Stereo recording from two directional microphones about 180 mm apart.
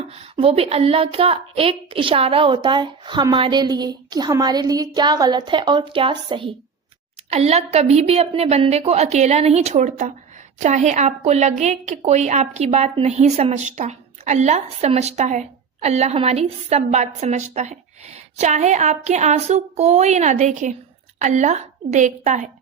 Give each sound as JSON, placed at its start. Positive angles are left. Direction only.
{"t": 0.2, "sound": "a woman's voice", "side_deg": -35}